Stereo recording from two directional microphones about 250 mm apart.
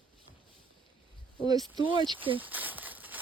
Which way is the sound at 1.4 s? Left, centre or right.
Centre.